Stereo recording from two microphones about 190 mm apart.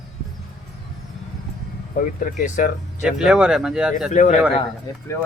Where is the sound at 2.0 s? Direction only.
45° left (ahead or behind).